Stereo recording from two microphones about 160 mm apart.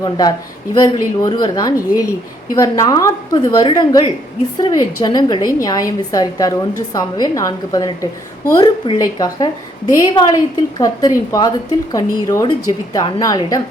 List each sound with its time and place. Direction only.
0.0 s a woman's voice: 25° left (ahead or behind)